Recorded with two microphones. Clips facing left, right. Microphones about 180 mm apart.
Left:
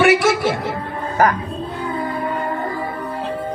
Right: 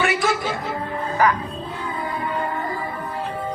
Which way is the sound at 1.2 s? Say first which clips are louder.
Left 3 dB; 45° left (ahead or behind).